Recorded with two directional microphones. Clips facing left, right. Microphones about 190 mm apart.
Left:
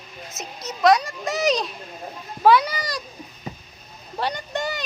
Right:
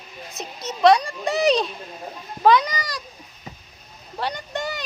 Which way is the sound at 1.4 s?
30° right (ahead or behind).